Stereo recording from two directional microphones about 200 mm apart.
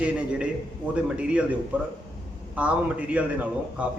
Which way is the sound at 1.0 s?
5° right (ahead or behind).